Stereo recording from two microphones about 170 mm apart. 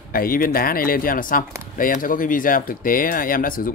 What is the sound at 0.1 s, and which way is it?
Speech, 60° left (ahead or behind).